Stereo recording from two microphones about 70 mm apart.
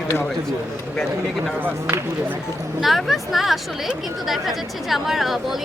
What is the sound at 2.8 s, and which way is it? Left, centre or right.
Speech, centre.